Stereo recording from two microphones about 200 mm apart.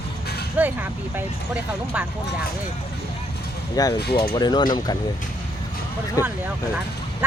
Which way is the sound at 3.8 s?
20° left (ahead or behind).